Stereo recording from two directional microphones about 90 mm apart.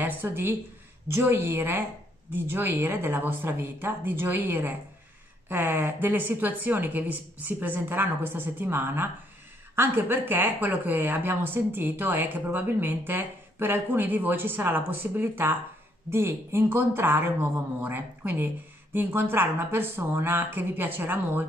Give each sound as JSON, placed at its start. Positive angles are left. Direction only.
{"t": 0.0, "sound": "speech", "side_deg": -20}